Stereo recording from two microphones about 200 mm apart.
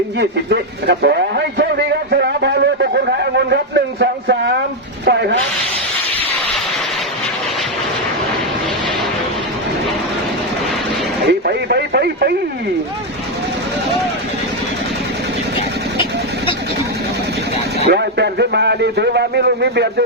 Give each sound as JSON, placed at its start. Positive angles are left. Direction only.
{"t": 0.2, "sound": "speech", "side_deg": -55}
{"t": 11.3, "sound": "speech", "side_deg": -55}
{"t": 17.8, "sound": "speech", "side_deg": -55}